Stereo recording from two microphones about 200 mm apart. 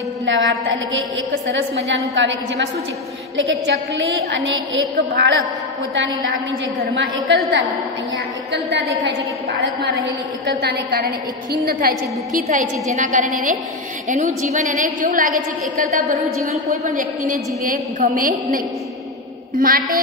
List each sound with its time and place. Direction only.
0.2 s a sound: 65° right (ahead or behind)
2.1 s a woman's voice: 65° right (ahead or behind)
7.0 s a woman's voice: 65° right (ahead or behind)
9.0 s a woman's voice: 55° right (ahead or behind)
12.3 s a woman's voice: 35° right (ahead or behind)
17.9 s a woman's voice: 40° right (ahead or behind)
19.6 s a woman's voice: 45° right (ahead or behind)